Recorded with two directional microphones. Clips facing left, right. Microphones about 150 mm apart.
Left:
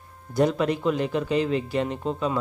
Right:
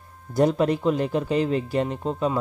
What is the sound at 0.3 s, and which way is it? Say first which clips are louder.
Speech: right 2 dB; 40° right (ahead or behind).